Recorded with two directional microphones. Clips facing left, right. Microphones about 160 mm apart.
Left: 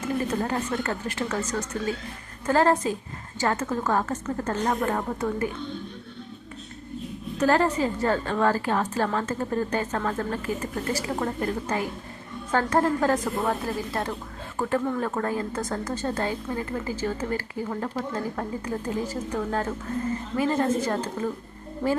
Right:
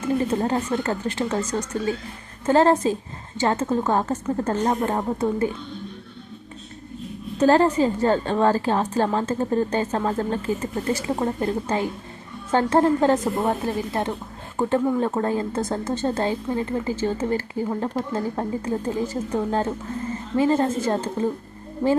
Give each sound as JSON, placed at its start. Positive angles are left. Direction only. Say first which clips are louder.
{"t": 0.3, "sound": "speech", "louder": "right 4 dB", "side_deg": -25}
{"t": 7.3, "sound": "speech", "louder": "right 5 dB", "side_deg": -30}
{"t": 21.8, "sound": "speech", "louder": "right 5 dB", "side_deg": -15}